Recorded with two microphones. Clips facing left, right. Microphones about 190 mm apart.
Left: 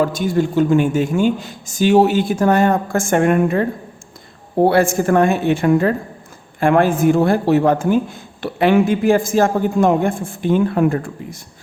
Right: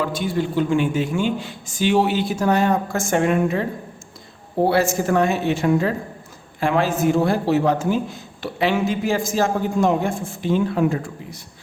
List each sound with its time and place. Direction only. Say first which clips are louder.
0.0 s speech: left 5 dB; 45° left (ahead or behind)